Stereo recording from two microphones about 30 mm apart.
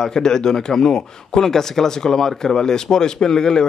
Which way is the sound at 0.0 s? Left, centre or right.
Left.